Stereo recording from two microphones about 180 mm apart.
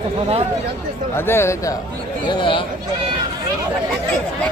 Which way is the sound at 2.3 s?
30° left (ahead or behind).